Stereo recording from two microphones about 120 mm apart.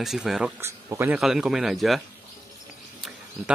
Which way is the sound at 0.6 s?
20° right (ahead or behind).